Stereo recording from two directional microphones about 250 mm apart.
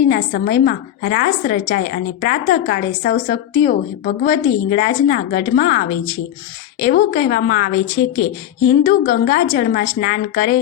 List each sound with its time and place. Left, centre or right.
0.1 s a woman's voice: left